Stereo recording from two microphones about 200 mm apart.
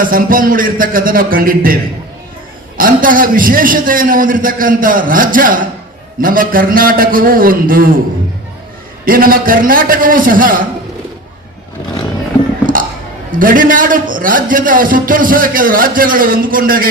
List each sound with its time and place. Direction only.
0.0 s a man's voice: 45° right (ahead or behind)
9.0 s a man's voice: 45° right (ahead or behind)
12.7 s a sound: 40° right (ahead or behind)
13.3 s a man's voice: 45° right (ahead or behind)